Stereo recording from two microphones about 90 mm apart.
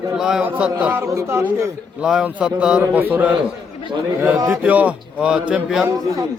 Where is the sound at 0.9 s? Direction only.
35° right (ahead or behind).